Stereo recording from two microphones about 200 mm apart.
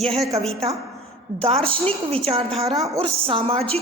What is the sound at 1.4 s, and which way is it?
A woman's voice, 30° right (ahead or behind).